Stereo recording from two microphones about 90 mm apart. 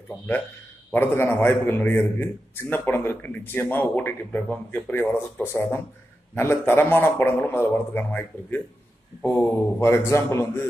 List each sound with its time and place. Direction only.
0.9 s a man's voice: 25° left (ahead or behind)